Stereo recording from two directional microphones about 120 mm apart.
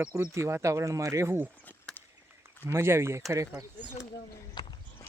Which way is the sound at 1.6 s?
15° left (ahead or behind).